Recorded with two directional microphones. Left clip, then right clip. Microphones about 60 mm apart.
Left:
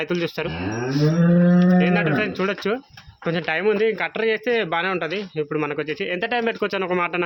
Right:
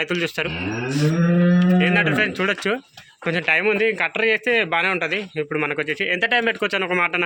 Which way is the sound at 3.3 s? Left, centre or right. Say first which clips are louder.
Right 2 dB; left.